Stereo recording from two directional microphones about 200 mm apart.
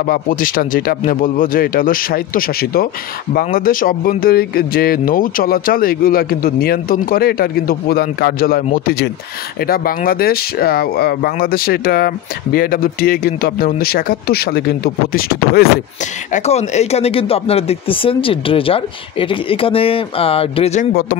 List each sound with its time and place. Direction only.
0.0 s speech: 45° left (ahead or behind)
16.3 s speech: 35° left (ahead or behind)